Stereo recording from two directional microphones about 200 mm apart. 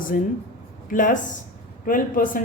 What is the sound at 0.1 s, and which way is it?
A woman's voice, 40° left (ahead or behind).